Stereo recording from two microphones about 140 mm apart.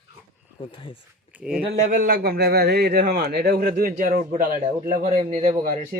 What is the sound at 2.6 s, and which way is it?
A man's voice, 90° right.